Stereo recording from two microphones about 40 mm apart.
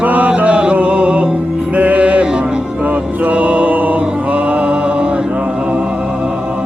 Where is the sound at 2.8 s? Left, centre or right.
Right.